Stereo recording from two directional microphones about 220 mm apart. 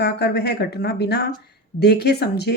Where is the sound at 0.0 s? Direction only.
45° left (ahead or behind).